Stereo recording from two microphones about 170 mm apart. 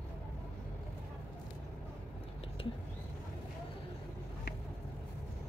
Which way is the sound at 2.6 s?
30° left (ahead or behind).